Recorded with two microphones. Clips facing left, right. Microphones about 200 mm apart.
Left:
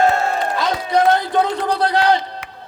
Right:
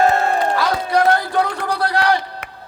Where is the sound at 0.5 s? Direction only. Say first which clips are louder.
Even; 20° left (ahead or behind).